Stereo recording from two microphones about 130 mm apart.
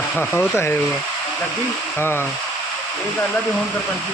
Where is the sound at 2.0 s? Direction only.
20° left (ahead or behind).